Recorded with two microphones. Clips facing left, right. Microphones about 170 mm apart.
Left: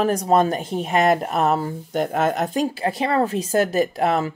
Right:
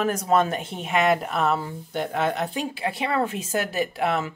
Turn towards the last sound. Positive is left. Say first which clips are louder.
# left 5 dB
turn(degrees=40)  # may be behind; listen again after turning